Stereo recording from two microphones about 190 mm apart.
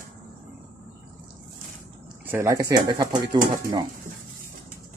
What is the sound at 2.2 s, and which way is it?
Speech, 10° right (ahead or behind).